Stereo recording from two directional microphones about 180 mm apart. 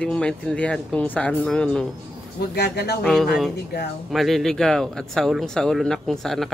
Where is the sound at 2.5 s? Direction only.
65° left (ahead or behind).